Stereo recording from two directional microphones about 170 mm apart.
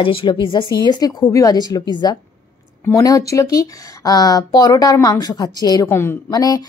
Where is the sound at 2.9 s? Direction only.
20° left (ahead or behind).